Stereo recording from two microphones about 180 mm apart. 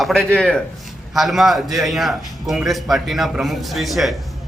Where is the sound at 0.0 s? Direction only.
Centre (ahead or behind).